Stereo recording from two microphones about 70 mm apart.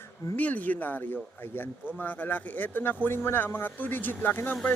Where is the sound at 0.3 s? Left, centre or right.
Left.